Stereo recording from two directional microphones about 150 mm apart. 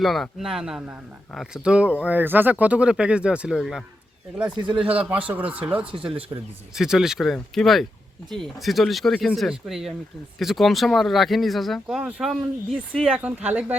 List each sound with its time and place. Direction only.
0.0 s a man's voice: centre (ahead or behind)
4.5 s speech: 30° right (ahead or behind)
4.9 s a man's voice: 10° right (ahead or behind)
5.8 s speech: 35° right (ahead or behind)
6.3 s speech: 20° right (ahead or behind)
6.7 s a man's voice: 5° right (ahead or behind)